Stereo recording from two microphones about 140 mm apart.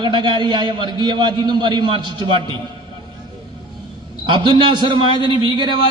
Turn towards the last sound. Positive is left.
turn(degrees=-35)  # may be behind; listen again after turning